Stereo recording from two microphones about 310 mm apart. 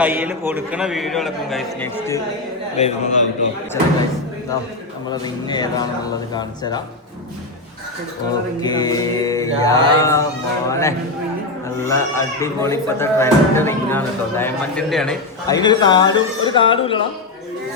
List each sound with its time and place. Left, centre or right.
0.0 s a man's voice: centre
2.7 s a man's voice: left
3.8 s speech: centre
5.2 s speech: centre
8.6 s speech: centre
15.4 s speech: centre